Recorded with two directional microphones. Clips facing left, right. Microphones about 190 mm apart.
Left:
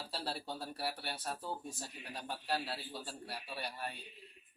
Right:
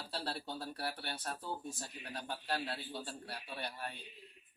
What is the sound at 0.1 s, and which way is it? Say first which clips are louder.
Speech: right 1 dB; 10° left (ahead or behind).